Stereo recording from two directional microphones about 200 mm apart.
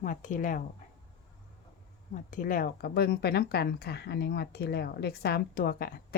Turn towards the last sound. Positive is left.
turn(degrees=50)  # may be behind; listen again after turning